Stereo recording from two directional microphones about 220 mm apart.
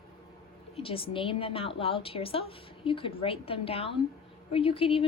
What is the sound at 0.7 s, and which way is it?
A woman's voice, 25° left (ahead or behind).